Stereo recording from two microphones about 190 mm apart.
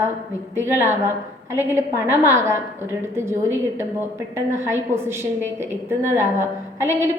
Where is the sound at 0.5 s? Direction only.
15° right (ahead or behind).